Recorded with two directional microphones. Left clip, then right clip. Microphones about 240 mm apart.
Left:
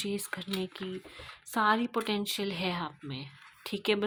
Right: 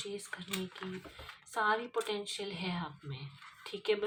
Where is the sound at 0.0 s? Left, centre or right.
Left.